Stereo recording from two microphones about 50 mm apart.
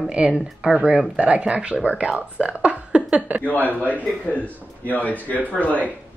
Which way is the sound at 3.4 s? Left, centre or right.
Left.